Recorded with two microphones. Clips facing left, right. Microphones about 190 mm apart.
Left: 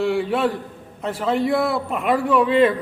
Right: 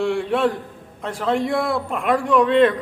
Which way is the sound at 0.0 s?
Centre (ahead or behind).